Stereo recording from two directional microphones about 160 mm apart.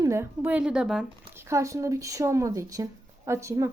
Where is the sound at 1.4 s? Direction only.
20° right (ahead or behind).